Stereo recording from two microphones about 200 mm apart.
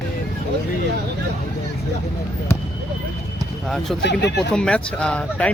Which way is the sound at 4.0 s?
60° left (ahead or behind).